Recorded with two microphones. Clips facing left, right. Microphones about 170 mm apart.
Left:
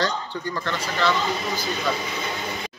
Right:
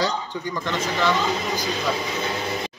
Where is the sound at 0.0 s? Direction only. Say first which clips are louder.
Right 1 dB; 15° right (ahead or behind).